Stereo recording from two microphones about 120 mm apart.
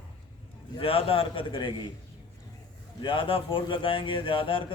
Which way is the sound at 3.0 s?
45° left (ahead or behind).